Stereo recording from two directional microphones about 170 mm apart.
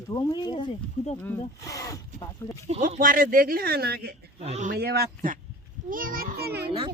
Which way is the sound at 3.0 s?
55° right (ahead or behind).